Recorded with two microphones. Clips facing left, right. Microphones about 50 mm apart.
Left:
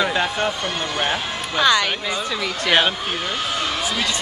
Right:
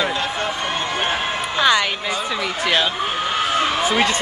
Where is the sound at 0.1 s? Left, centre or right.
Left.